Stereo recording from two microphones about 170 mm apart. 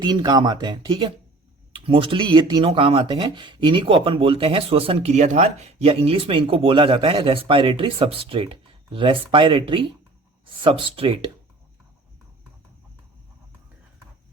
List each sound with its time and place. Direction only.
0.0 s speech: 25° right (ahead or behind)